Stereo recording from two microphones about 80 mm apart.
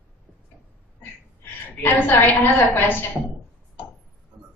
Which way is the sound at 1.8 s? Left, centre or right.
Left.